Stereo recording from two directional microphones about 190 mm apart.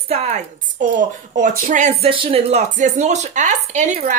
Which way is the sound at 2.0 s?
30° right (ahead or behind).